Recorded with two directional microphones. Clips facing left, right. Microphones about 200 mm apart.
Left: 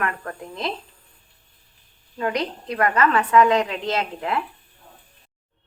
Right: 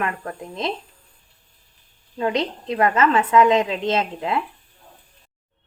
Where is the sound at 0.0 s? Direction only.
20° right (ahead or behind).